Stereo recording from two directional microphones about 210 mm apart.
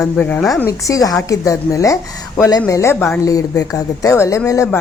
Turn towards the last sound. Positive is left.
turn(degrees=15)  # may be behind; listen again after turning